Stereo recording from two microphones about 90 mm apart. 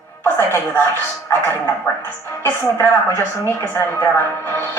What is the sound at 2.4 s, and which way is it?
A woman's voice, 25° left (ahead or behind).